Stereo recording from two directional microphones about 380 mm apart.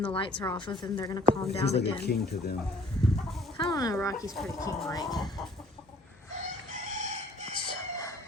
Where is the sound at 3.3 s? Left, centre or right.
Centre.